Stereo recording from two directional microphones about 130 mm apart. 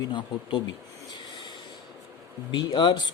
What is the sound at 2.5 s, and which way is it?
Speech, 35° left (ahead or behind).